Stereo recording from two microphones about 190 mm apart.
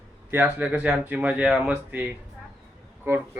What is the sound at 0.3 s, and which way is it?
Speech, 10° right (ahead or behind).